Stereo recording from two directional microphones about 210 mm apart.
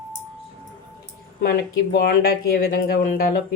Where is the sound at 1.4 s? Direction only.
45° left (ahead or behind).